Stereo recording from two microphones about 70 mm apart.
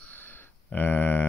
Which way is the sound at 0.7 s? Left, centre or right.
Left.